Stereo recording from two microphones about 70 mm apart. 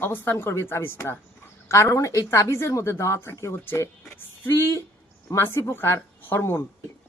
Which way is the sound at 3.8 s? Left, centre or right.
Left.